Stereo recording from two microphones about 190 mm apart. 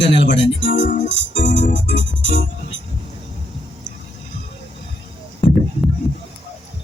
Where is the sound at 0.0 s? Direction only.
70° left (ahead or behind).